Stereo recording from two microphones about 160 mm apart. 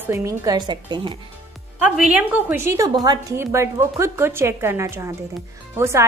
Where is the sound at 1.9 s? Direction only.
5° right (ahead or behind).